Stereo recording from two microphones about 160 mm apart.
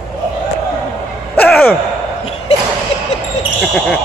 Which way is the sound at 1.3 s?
10° left (ahead or behind).